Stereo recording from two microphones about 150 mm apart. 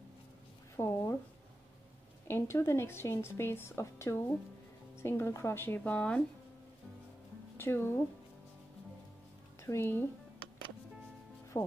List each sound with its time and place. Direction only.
0.7 s a woman's voice: 15° left (ahead or behind)
2.2 s a woman's voice: 15° left (ahead or behind)
7.5 s speech: 15° left (ahead or behind)
9.6 s speech: 15° left (ahead or behind)
11.5 s speech: 20° left (ahead or behind)